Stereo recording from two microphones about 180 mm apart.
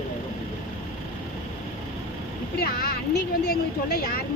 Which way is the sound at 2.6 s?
60° left (ahead or behind).